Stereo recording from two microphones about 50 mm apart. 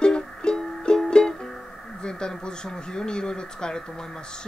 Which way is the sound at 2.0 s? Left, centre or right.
Centre.